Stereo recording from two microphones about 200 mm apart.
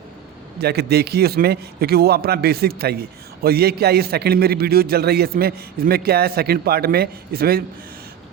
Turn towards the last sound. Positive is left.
turn(degrees=-50)  # may be behind; listen again after turning